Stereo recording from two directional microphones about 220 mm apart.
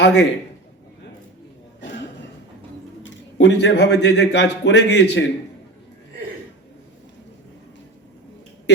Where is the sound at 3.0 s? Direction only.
55° left (ahead or behind).